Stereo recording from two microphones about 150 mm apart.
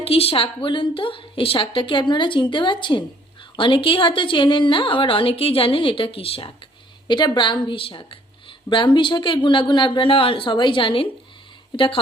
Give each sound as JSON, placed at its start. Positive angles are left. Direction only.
{"t": 0.0, "sound": "a woman's voice", "side_deg": 40}